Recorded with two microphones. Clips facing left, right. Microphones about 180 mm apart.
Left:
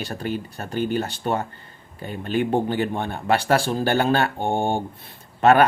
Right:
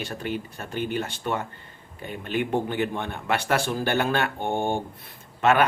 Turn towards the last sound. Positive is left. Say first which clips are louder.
# left 5 dB
turn(degrees=40)  # may be behind; listen again after turning